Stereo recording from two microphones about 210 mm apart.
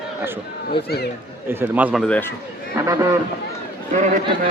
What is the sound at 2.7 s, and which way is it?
Speech, 15° right (ahead or behind).